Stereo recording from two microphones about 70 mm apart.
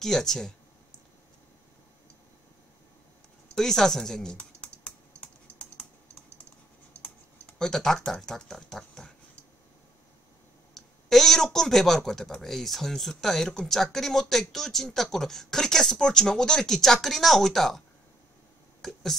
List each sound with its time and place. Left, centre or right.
0.0 s speech: centre
3.5 s speech: centre
7.5 s speech: centre
10.7 s speech: centre
18.8 s a sound: centre